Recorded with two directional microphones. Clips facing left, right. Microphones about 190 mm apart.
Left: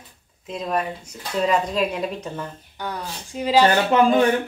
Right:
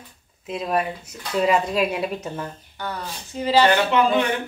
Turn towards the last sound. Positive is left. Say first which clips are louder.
# left 2 dB
turn(degrees=40)  # may be behind; listen again after turning